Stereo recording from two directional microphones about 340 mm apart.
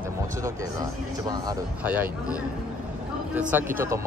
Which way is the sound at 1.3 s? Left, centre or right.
Centre.